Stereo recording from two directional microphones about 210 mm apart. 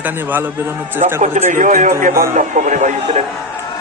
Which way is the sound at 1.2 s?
35° right (ahead or behind).